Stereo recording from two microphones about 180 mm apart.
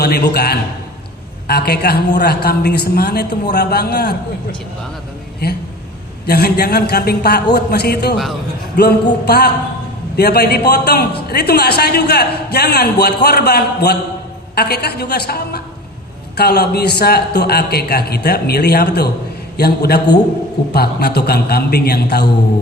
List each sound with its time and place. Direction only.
0.0 s a man's voice: 60° left (ahead or behind)
6.2 s a man's voice: 60° left (ahead or behind)